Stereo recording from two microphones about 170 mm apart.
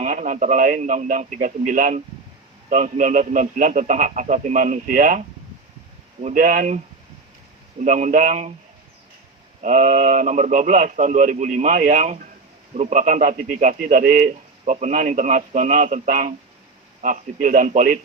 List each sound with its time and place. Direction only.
0.0 s a man's voice: 50° right (ahead or behind)
6.2 s a man's voice: 50° right (ahead or behind)
7.8 s a man's voice: 45° right (ahead or behind)
9.6 s a man's voice: 45° right (ahead or behind)